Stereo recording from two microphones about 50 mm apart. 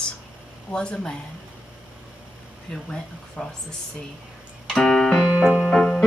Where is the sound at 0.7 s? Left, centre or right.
Centre.